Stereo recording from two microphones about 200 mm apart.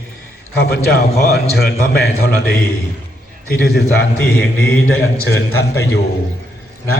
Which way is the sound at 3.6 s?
55° left (ahead or behind).